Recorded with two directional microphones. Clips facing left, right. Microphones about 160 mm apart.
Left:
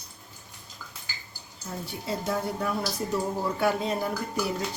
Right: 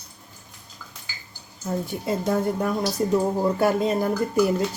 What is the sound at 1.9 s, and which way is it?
Speech, 50° right (ahead or behind).